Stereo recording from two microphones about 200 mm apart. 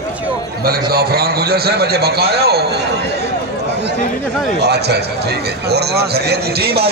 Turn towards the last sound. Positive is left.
turn(degrees=-55)  # may be behind; listen again after turning